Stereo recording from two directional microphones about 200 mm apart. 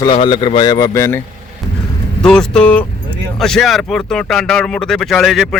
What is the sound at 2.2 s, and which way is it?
Speech, 5° left (ahead or behind).